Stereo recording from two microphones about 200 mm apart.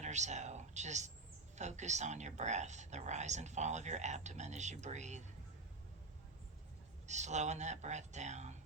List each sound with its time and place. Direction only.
0.0 s a sound: 35° right (ahead or behind)
1.5 s speech: 35° right (ahead or behind)
7.1 s speech: 35° right (ahead or behind)